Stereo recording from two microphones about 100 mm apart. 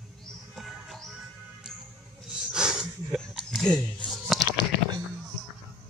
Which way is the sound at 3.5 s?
5° left (ahead or behind).